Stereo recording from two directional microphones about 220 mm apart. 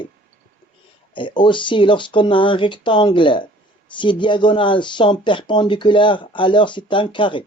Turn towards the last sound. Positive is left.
turn(degrees=20)  # may be behind; listen again after turning